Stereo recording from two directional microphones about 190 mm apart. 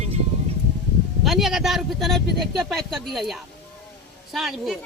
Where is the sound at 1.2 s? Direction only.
Centre (ahead or behind).